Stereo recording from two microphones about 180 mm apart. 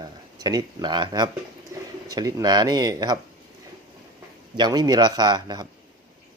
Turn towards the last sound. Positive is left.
turn(degrees=-25)  # may be behind; listen again after turning